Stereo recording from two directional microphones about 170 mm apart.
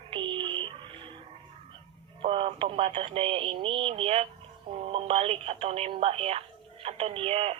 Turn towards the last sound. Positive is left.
turn(degrees=-35)  # may be behind; listen again after turning